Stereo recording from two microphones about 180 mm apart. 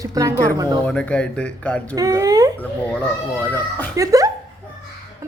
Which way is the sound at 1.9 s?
15° right (ahead or behind).